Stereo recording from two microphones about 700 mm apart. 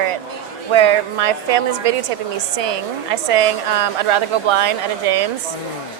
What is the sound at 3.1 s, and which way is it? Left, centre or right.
A woman's voice, right.